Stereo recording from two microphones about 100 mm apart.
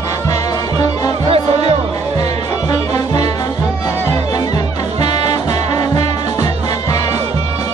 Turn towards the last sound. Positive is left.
turn(degrees=35)  # may be behind; listen again after turning